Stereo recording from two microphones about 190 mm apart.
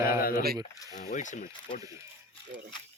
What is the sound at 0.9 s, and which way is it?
Speech, 40° left (ahead or behind).